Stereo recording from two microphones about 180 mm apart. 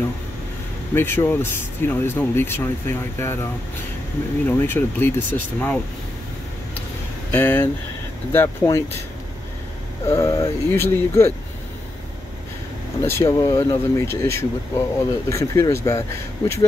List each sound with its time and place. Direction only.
0.9 s speech: 15° left (ahead or behind)
4.5 s speech: 10° left (ahead or behind)
7.3 s speech: 10° left (ahead or behind)
10.1 s speech: 15° left (ahead or behind)
13.0 s speech: 15° left (ahead or behind)